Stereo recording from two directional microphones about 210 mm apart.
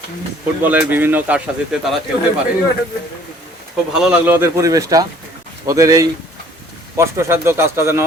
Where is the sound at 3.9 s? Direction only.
5° right (ahead or behind).